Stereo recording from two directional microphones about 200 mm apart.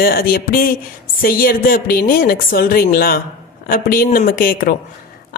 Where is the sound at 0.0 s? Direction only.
50° left (ahead or behind).